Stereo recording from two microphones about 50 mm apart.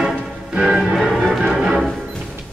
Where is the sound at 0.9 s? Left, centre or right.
Centre.